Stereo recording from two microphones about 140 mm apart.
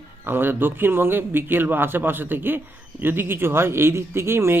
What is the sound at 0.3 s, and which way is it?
Speech, 15° right (ahead or behind).